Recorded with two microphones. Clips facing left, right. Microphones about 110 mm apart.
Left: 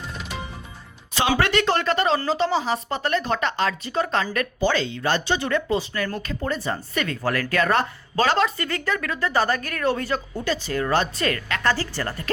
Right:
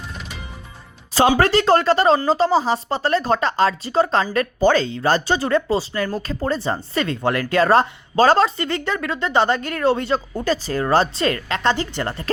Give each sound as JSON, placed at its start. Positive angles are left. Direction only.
{"t": 1.4, "sound": "speech", "side_deg": -35}
{"t": 10.3, "sound": "speech", "side_deg": -40}